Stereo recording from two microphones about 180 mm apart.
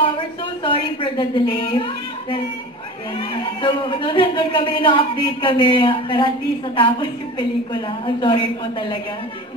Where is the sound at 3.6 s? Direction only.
25° left (ahead or behind).